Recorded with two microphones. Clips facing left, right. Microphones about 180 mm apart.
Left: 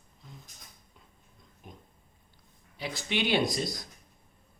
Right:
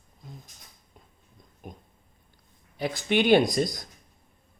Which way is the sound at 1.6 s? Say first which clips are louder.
Right 6 dB; 50° right (ahead or behind).